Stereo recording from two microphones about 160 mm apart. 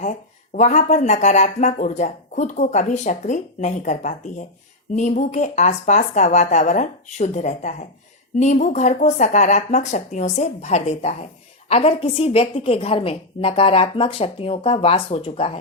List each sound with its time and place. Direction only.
0.0 s a woman's voice: 50° left (ahead or behind)